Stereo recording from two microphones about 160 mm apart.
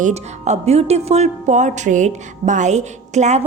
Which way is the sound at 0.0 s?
45° right (ahead or behind).